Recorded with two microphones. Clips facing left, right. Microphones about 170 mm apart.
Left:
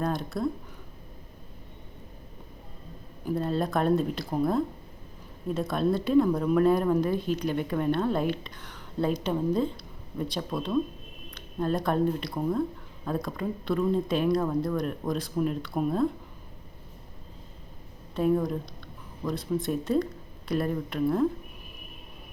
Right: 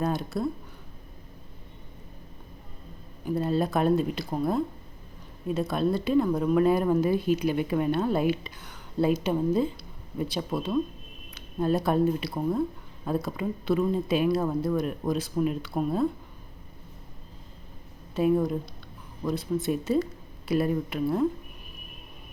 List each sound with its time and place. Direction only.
0.0 s speech: centre (ahead or behind)
3.2 s speech: centre (ahead or behind)
18.1 s speech: 5° right (ahead or behind)